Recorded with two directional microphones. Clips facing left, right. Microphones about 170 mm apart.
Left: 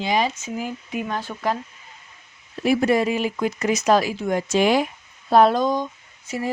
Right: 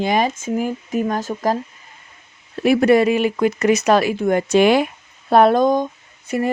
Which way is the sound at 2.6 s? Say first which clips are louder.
Right 5 dB; 65° right (ahead or behind).